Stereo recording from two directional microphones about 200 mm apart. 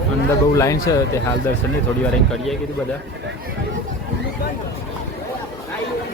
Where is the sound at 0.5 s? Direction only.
15° left (ahead or behind).